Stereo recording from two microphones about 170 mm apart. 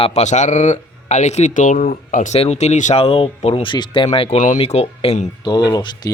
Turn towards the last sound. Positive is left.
turn(degrees=20)  # may be behind; listen again after turning